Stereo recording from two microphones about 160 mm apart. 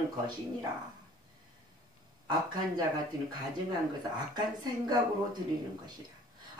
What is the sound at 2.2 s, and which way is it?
Speech, 25° right (ahead or behind).